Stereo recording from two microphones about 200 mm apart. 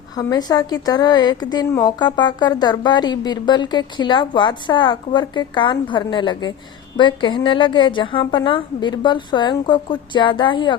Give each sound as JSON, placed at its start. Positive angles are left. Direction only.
{"t": 0.2, "sound": "a woman's voice", "side_deg": 20}